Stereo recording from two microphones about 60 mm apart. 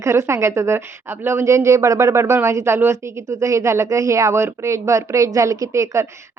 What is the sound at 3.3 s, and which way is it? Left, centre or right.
A woman's voice, right.